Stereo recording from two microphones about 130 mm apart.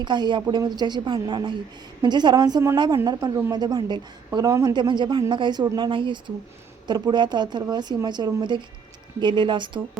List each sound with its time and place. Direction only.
0.0 s a woman's voice: 35° right (ahead or behind)